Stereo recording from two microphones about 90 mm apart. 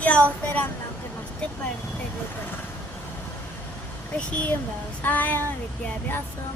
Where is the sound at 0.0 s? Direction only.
15° left (ahead or behind).